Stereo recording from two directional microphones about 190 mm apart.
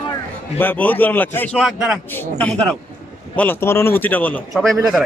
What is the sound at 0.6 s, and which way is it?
Speech, 10° left (ahead or behind).